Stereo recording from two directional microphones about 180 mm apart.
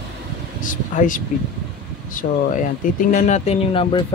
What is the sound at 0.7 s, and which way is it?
Speech, 45° left (ahead or behind).